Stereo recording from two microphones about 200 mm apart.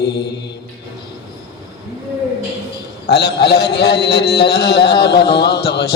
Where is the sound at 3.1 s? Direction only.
55° left (ahead or behind).